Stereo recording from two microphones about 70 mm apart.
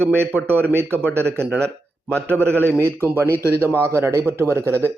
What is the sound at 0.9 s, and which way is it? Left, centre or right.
Speech, left.